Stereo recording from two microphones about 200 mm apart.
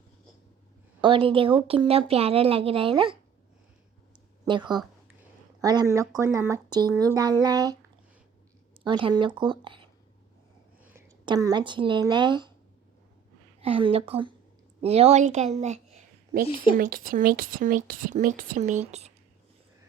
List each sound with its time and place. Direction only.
1.0 s a woman's voice: 25° right (ahead or behind)
4.4 s a woman's voice: 25° right (ahead or behind)
8.8 s a woman's voice: 25° right (ahead or behind)
11.3 s a woman's voice: 20° right (ahead or behind)
13.6 s a woman's voice: 25° right (ahead or behind); by 18.7 s 45° right (ahead or behind)
18.8 s speech: 35° right (ahead or behind)